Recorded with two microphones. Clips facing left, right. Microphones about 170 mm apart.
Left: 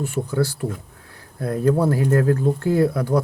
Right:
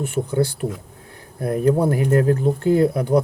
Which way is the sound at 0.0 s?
20° right (ahead or behind).